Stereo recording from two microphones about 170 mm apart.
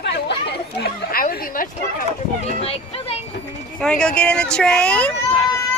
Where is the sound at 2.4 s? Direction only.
35° left (ahead or behind).